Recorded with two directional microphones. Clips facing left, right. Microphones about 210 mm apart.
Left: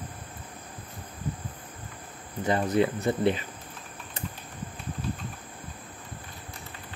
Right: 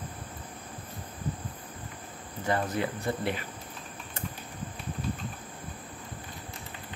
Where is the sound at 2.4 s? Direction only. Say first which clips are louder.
Left 5 dB; 20° left (ahead or behind).